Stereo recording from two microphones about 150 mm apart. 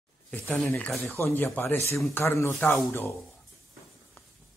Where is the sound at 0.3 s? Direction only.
10° left (ahead or behind).